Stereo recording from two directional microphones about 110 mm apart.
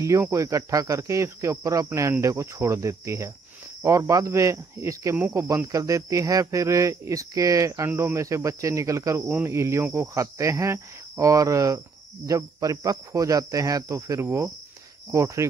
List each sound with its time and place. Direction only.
0.0 s speech: 30° right (ahead or behind)